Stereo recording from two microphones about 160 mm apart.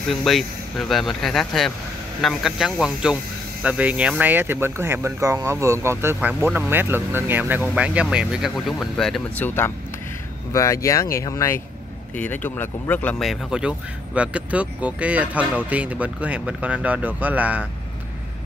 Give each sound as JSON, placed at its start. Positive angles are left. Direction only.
{"t": 0.1, "sound": "speech", "side_deg": 0}
{"t": 10.5, "sound": "speech", "side_deg": 20}
{"t": 13.2, "sound": "speech", "side_deg": 0}